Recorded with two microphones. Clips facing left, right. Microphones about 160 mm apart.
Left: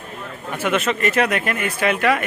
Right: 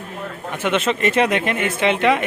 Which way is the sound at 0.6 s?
25° right (ahead or behind).